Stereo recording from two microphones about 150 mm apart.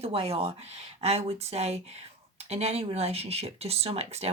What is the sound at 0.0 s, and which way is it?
Speech, 40° right (ahead or behind).